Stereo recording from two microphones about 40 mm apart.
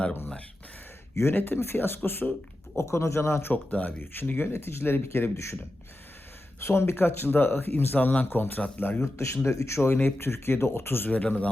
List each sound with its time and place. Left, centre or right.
1.2 s speech: left
2.7 s speech: left
3.5 s speech: left
3.9 s speech: left
4.4 s speech: left
6.6 s speech: left
11.1 s speech: left